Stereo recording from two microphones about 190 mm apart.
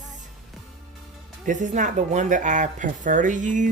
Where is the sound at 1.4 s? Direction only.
40° right (ahead or behind).